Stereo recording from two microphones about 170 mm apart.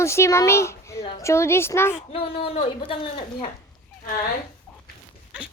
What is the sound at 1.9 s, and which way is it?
Speech, 35° left (ahead or behind).